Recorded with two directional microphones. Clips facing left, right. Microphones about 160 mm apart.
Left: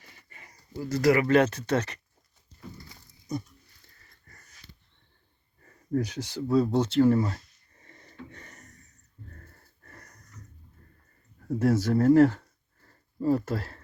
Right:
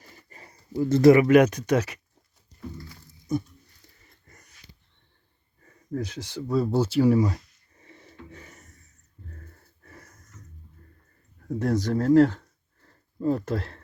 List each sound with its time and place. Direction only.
0.0 s speech: 40° right (ahead or behind); by 2.0 s 10° right (ahead or behind)
5.6 s speech: 5° left (ahead or behind)
6.5 s a sound: 5° right (ahead or behind)
9.3 s wheeze: 5° right (ahead or behind)
11.4 s speech: 5° left (ahead or behind)